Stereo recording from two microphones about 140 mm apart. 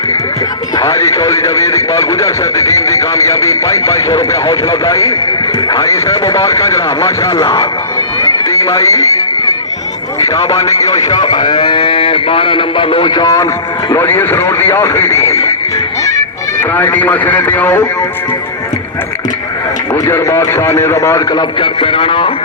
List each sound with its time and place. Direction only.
0.8 s a man's voice: 20° left (ahead or behind)
8.2 s music: 20° left (ahead or behind)
10.2 s a man's voice: 20° left (ahead or behind)
16.7 s a man's voice: 15° left (ahead or behind)
19.9 s a man's voice: 20° left (ahead or behind); by 22.3 s 40° left (ahead or behind)